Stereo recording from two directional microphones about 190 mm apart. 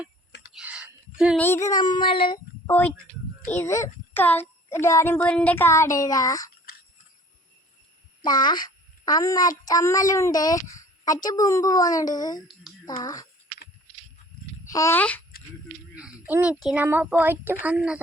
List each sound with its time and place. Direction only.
0.5 s whispering: 5° right (ahead or behind)
1.4 s a child's voice: 15° left (ahead or behind)
2.6 s a woman's voice: 10° left (ahead or behind)
8.2 s a child's voice: 20° left (ahead or behind)
14.6 s speech: 15° left (ahead or behind)
16.0 s a child's voice: 5° right (ahead or behind)